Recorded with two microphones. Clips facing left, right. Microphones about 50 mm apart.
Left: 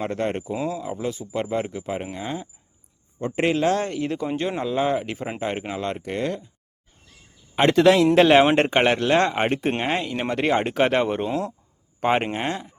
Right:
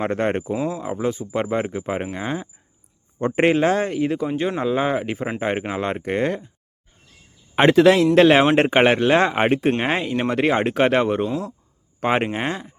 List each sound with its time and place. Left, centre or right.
0.0 s speech: right
3.2 s speech: right
3.8 s speech: centre
4.6 s speech: centre
7.7 s speech: centre
8.7 s speech: centre